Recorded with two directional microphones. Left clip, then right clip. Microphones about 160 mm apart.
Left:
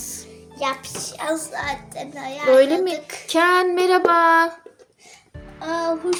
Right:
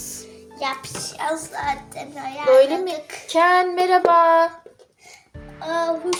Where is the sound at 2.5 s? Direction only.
25° left (ahead or behind).